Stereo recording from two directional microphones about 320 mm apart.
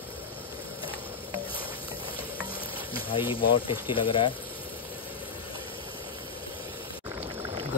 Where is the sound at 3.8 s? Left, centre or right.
Centre.